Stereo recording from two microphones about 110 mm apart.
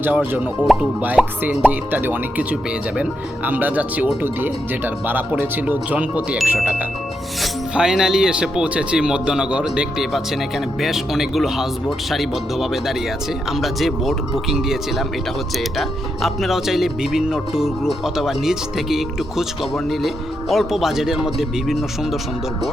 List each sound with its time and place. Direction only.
0.0 s speech: 15° right (ahead or behind)